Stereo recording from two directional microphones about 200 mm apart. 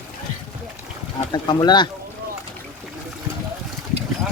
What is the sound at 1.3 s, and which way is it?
Speech, 20° left (ahead or behind).